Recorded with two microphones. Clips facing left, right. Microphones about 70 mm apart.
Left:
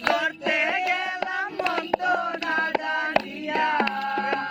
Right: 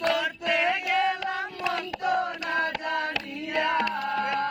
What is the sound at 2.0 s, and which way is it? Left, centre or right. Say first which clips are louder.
Singing: left 2 dB; left.